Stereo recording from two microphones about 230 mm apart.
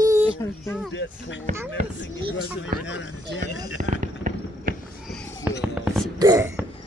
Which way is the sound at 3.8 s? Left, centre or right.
Right.